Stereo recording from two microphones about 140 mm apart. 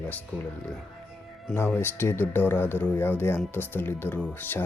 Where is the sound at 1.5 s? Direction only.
15° left (ahead or behind).